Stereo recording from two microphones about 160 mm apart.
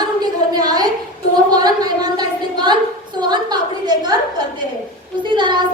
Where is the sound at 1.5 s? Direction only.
25° right (ahead or behind).